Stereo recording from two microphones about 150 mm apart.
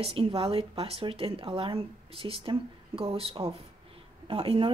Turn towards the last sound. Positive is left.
turn(degrees=-40)  # may be behind; listen again after turning